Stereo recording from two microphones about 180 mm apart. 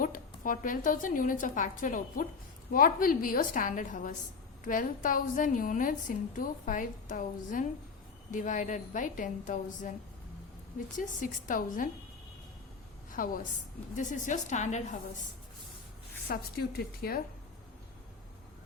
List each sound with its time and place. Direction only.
0.0 s a woman's voice: 50° left (ahead or behind)
10.9 s a woman's voice: 45° left (ahead or behind)
13.1 s a woman's voice: 50° left (ahead or behind)
16.2 s a woman's voice: 55° left (ahead or behind)